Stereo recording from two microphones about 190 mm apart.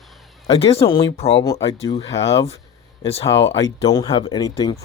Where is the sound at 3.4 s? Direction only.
70° left (ahead or behind).